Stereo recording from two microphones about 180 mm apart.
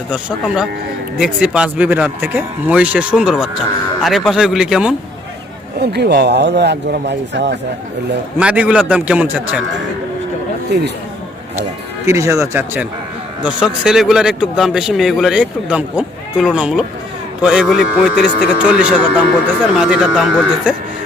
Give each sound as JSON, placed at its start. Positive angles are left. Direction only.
{"t": 0.1, "sound": "a man's voice", "side_deg": -5}
{"t": 5.8, "sound": "speech", "side_deg": -65}
{"t": 8.4, "sound": "speech", "side_deg": -5}
{"t": 10.7, "sound": "speech", "side_deg": -65}
{"t": 12.0, "sound": "a man's voice", "side_deg": -15}